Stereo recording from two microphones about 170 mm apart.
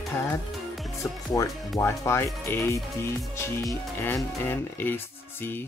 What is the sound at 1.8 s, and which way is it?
Speech, 15° left (ahead or behind).